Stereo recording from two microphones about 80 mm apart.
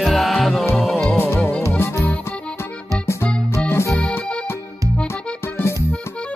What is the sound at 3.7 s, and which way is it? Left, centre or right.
Music, left.